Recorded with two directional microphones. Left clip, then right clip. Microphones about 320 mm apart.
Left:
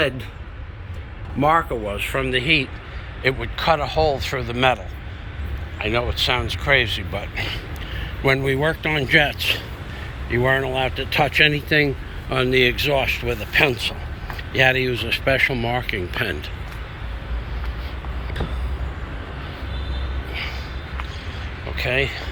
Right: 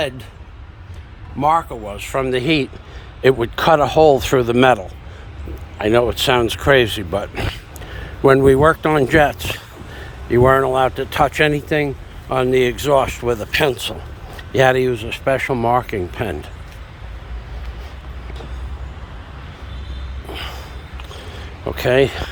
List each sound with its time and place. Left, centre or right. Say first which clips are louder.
1.4 s speech: right 2 dB; centre
2.3 s speech: left 1 dB; centre
5.8 s speech: right 6 dB; right; by 16.5 s centre
20.3 s a sound: even; right
21.8 s speech: right 7 dB; right